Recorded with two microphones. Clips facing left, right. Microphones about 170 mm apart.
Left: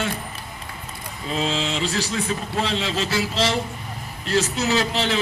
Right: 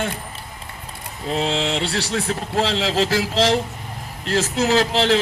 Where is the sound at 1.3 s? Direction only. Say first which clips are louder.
Right 3 dB; 65° right (ahead or behind); by 3.1 s 85° right.